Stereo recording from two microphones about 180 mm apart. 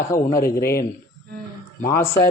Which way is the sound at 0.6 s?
55° left (ahead or behind).